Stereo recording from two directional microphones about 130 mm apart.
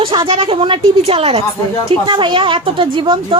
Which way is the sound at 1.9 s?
35° right (ahead or behind).